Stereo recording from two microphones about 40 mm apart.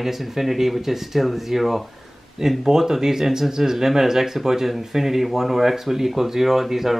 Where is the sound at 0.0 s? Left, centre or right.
Centre.